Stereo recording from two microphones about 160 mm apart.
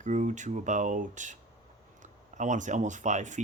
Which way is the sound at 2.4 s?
50° right (ahead or behind).